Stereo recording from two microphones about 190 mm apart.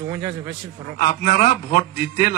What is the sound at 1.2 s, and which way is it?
Speech, 45° left (ahead or behind).